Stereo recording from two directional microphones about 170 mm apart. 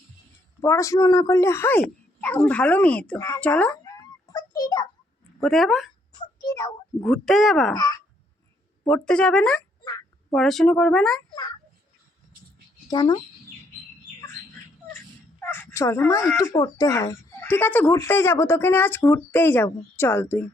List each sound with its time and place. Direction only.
0.6 s speech: 15° left (ahead or behind)
3.8 s a sound: 20° left (ahead or behind)
5.4 s speech: centre (ahead or behind)
6.1 s a sound: 20° left (ahead or behind)
7.0 s speech: 5° left (ahead or behind)
8.9 s speech: 5° left (ahead or behind)
9.8 s quack: 20° left (ahead or behind)
10.3 s speech: centre (ahead or behind)
12.9 s a child's voice: 25° left (ahead or behind)
15.4 s speech: 10° left (ahead or behind)